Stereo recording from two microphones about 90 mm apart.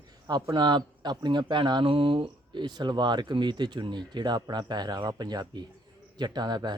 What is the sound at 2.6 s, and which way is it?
Speech, 55° right (ahead or behind).